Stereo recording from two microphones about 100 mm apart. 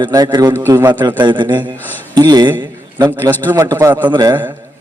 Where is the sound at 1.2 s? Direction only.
50° right (ahead or behind).